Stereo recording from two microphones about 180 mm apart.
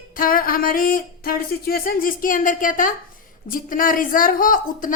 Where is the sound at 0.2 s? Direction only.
50° left (ahead or behind).